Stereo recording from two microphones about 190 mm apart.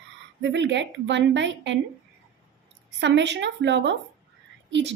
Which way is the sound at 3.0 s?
70° right (ahead or behind).